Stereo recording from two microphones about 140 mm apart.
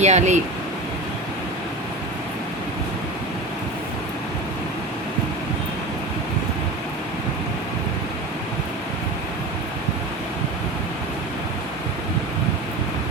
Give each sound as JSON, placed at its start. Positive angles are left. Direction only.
{"t": 0.0, "sound": "speech", "side_deg": -55}